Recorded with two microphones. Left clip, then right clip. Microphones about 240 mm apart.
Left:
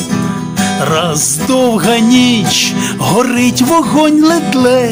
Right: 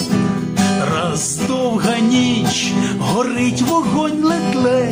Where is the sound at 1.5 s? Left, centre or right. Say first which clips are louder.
Left 8 dB; left.